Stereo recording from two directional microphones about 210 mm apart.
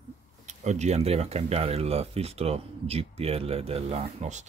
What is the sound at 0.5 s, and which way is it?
Speech, 35° right (ahead or behind).